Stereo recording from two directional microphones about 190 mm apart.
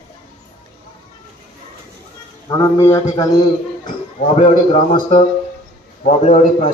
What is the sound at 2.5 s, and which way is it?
Speech, 15° left (ahead or behind).